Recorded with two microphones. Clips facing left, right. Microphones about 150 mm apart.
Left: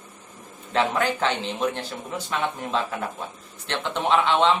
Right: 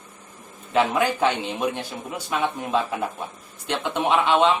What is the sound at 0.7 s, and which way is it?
Speech, 10° right (ahead or behind).